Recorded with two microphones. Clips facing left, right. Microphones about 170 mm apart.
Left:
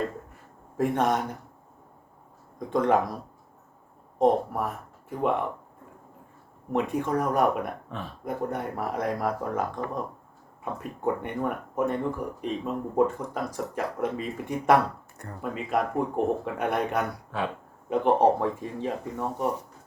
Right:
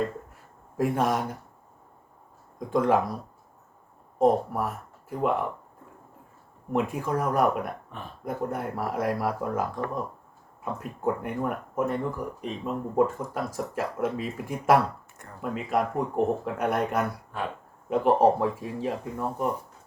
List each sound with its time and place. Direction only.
0.8 s speech: 5° right (ahead or behind)
2.6 s speech: 5° right (ahead or behind)
4.2 s speech: centre (ahead or behind)
6.7 s speech: centre (ahead or behind)
17.3 s speech: 90° left
17.8 s speech: 5° right (ahead or behind)